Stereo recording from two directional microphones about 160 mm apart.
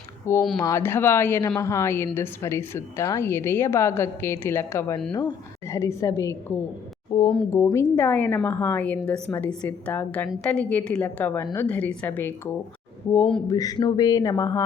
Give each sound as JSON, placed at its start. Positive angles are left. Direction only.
{"t": 0.3, "sound": "a woman's voice", "side_deg": 15}
{"t": 7.1, "sound": "speech", "side_deg": 30}
{"t": 7.5, "sound": "a woman's voice", "side_deg": 20}